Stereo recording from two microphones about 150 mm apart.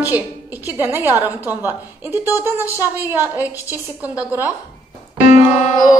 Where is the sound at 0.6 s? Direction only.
15° right (ahead or behind).